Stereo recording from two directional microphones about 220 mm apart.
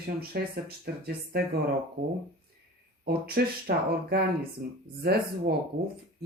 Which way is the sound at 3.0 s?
45° right (ahead or behind).